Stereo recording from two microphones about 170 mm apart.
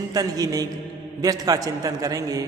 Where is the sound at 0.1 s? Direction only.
20° right (ahead or behind).